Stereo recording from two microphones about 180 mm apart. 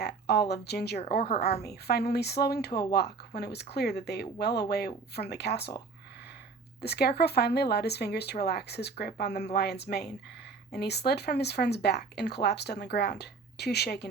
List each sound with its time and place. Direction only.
0.0 s speech: 65° left (ahead or behind)
1.2 s a woman's voice: 40° left (ahead or behind)
1.6 s speech: 65° left (ahead or behind)
6.8 s speech: 65° left (ahead or behind)